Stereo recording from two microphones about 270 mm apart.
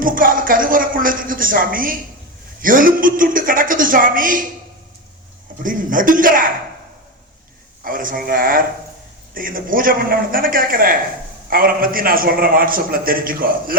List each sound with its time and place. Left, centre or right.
0.0 s a man's voice: right
5.6 s speech: right
7.9 s a man's voice: right